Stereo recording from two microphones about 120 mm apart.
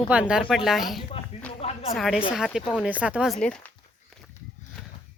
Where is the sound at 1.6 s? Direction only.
55° left (ahead or behind).